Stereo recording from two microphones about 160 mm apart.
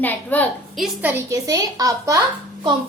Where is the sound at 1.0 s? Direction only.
15° right (ahead or behind).